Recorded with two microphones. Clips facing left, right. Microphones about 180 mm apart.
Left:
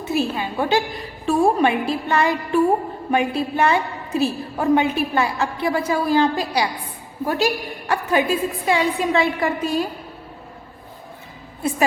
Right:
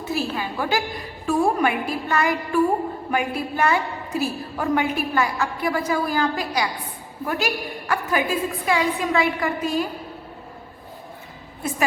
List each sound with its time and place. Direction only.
0.0 s a woman's voice: 20° left (ahead or behind)